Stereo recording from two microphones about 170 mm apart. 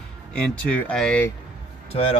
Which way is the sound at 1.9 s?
35° left (ahead or behind).